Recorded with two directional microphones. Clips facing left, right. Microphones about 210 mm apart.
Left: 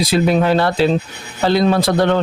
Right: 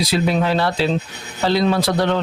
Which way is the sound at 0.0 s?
50° left (ahead or behind).